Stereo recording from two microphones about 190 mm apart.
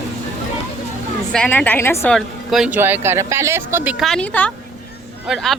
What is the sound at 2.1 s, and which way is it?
Speech, centre (ahead or behind).